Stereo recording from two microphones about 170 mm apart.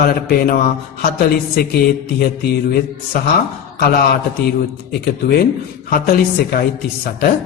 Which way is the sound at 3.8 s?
65° left (ahead or behind).